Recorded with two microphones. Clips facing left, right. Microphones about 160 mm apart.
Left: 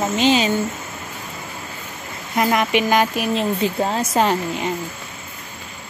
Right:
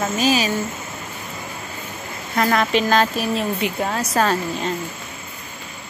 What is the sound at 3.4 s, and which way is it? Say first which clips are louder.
Speech: left 2 dB; 30° left (ahead or behind).